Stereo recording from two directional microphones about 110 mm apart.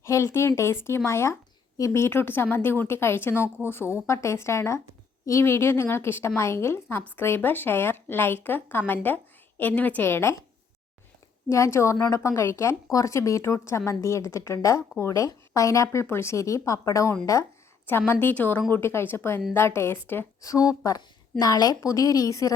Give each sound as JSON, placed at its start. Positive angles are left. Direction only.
{"t": 0.0, "sound": "a woman's voice", "side_deg": 25}
{"t": 11.4, "sound": "a woman's voice", "side_deg": 25}
{"t": 20.4, "sound": "a woman's voice", "side_deg": 30}